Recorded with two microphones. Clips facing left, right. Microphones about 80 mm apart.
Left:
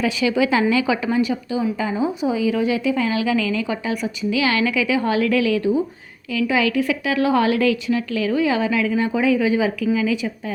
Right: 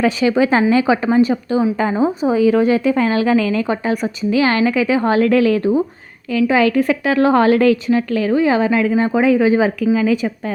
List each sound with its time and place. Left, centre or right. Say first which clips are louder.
0.0 s a woman's voice: right 4 dB; right